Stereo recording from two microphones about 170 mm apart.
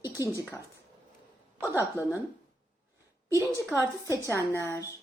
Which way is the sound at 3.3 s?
15° left (ahead or behind).